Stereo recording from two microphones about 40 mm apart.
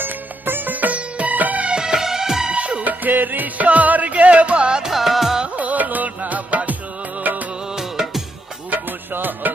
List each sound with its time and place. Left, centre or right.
0.0 s music: right
1.6 s music: centre
2.6 s music: right
3.0 s music: right
4.8 s music: centre
5.5 s music: right
7.8 s music: centre
8.7 s music: right